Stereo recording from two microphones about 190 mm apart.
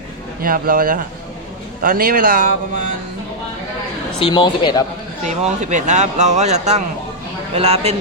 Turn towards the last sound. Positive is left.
turn(degrees=-35)  # may be behind; listen again after turning